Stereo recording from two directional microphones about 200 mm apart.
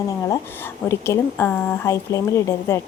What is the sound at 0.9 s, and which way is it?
A woman's voice, 10° left (ahead or behind).